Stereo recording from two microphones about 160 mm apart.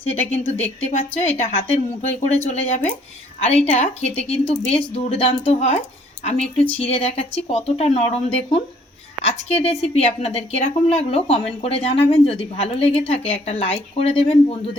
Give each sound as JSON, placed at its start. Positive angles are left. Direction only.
{"t": 0.0, "sound": "a woman's voice", "side_deg": 40}